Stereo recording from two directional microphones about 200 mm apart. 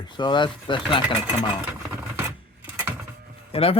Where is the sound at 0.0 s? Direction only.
20° left (ahead or behind).